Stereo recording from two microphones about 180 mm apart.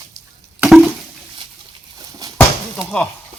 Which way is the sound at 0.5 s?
5° right (ahead or behind).